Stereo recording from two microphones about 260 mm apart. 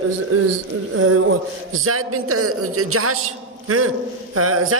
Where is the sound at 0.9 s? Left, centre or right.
Right.